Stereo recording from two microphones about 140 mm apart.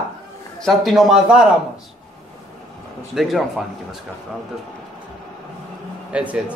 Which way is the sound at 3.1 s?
Centre (ahead or behind).